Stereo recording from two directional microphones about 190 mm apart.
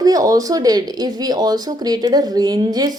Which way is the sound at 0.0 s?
20° right (ahead or behind).